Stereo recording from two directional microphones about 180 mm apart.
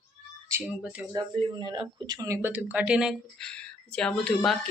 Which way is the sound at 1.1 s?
25° right (ahead or behind).